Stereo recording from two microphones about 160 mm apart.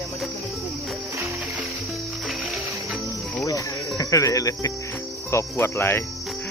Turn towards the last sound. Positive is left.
turn(degrees=15)  # may be behind; listen again after turning